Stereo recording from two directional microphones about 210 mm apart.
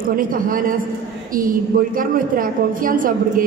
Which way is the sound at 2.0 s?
40° right (ahead or behind).